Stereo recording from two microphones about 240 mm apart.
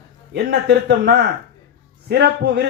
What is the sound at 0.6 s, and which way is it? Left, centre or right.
A man's voice, right.